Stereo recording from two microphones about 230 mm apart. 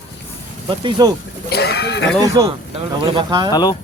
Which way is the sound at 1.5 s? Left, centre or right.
Left.